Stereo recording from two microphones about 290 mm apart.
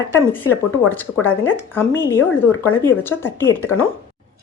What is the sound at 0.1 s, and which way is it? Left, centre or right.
Speech, centre.